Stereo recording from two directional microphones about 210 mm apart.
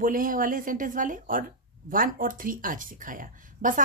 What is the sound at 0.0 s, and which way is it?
Speech, 40° right (ahead or behind).